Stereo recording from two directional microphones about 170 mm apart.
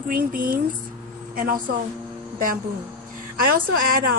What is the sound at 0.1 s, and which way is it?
A woman's voice, 55° right (ahead or behind).